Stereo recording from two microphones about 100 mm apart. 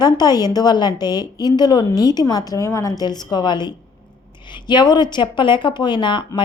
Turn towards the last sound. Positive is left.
turn(degrees=50)  # may be behind; listen again after turning